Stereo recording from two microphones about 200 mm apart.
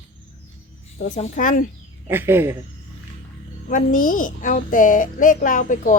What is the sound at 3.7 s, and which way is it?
A woman's voice, 40° left (ahead or behind).